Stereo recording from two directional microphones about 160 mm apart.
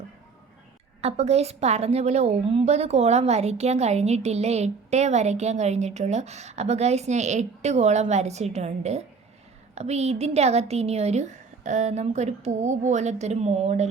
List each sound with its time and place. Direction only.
1.0 s a woman's voice: 40° right (ahead or behind)